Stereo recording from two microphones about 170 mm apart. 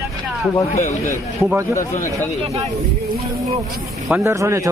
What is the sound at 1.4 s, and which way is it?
Speech, 10° right (ahead or behind).